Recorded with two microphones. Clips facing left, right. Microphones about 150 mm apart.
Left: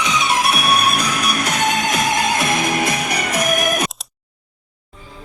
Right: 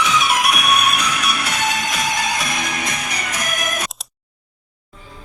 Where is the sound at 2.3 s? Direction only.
60° left (ahead or behind).